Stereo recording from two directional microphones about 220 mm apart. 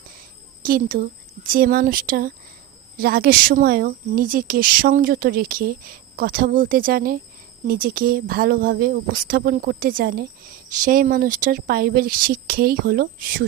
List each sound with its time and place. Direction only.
0.6 s speech: 40° right (ahead or behind)